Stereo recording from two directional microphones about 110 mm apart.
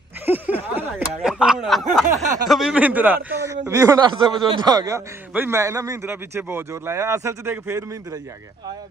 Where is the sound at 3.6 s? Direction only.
30° right (ahead or behind).